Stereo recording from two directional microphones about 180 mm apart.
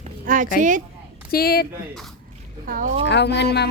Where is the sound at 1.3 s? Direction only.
55° left (ahead or behind).